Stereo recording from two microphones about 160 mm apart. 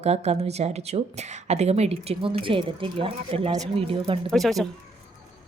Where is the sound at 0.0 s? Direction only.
40° right (ahead or behind).